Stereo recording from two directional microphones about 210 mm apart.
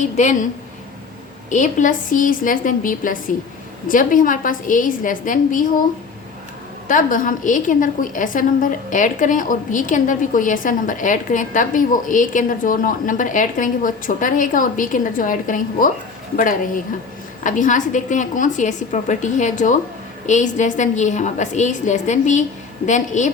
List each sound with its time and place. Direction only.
0.2 s a woman's voice: 35° left (ahead or behind)
1.5 s a woman's voice: 35° left (ahead or behind)
6.8 s a woman's voice: 40° left (ahead or behind)
17.4 s a woman's voice: 40° left (ahead or behind)